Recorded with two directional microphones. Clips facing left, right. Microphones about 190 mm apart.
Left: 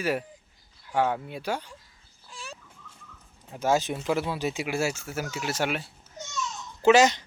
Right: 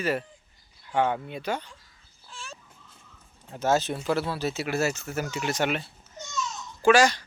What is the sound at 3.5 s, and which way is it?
Speech, 10° left (ahead or behind).